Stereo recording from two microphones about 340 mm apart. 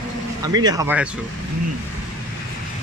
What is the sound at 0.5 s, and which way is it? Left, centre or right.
Speech, centre.